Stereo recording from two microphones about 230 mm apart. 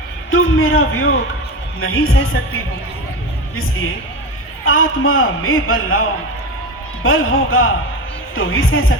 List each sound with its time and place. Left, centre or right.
0.3 s a man's voice: left
4.6 s a man's voice: left